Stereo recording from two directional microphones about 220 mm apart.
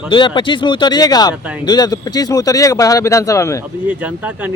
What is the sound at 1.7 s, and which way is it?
Speech, 15° left (ahead or behind).